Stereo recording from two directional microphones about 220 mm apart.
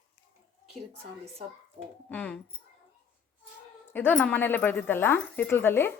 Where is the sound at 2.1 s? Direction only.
5° left (ahead or behind).